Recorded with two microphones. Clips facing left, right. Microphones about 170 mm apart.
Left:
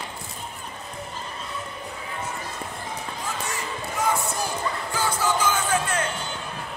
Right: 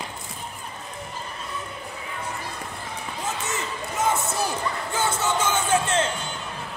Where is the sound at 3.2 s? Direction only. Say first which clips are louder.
Right 2 dB; 20° right (ahead or behind).